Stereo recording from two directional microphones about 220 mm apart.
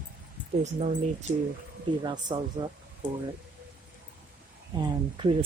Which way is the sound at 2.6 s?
15° right (ahead or behind).